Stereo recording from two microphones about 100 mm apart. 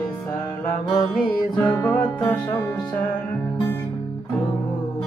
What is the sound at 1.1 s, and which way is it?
Music, 10° left (ahead or behind).